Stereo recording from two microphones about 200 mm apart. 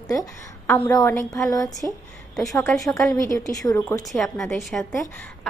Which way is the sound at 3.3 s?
15° left (ahead or behind).